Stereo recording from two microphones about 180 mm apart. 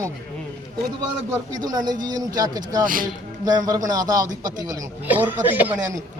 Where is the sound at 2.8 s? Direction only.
50° right (ahead or behind).